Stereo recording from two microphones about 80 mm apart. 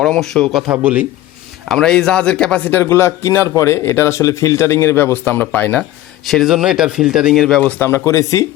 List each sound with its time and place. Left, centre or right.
0.0 s speech: centre
0.7 s speech: centre
1.6 s a man's voice: centre
2.6 s a man's voice: left
6.2 s speech: centre
7.3 s speech: centre
7.6 s a man's voice: left